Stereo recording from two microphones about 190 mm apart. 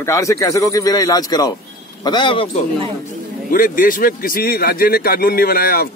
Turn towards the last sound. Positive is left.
turn(degrees=50)  # may be behind; listen again after turning